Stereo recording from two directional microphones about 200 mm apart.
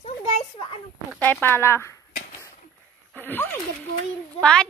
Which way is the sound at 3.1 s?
10° left (ahead or behind).